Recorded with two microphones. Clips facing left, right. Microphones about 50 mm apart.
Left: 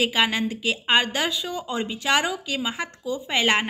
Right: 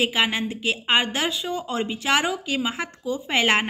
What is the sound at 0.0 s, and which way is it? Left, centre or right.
A woman's voice, centre.